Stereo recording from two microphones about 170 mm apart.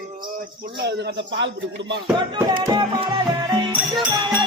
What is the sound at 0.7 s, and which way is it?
Speech, 80° right.